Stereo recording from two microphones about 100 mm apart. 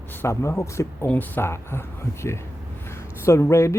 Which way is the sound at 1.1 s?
20° left (ahead or behind).